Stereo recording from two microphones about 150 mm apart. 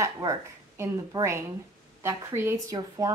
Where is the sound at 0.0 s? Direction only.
20° right (ahead or behind).